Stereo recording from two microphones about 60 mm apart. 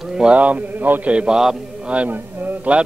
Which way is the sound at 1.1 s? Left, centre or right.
Centre.